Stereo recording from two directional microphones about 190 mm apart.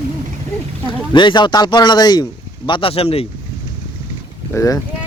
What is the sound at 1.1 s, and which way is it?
Speech, 25° left (ahead or behind).